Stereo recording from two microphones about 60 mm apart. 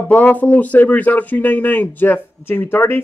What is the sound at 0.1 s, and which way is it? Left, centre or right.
Speech, left.